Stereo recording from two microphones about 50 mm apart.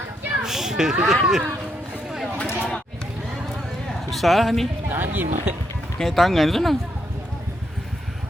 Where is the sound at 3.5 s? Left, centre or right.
Centre.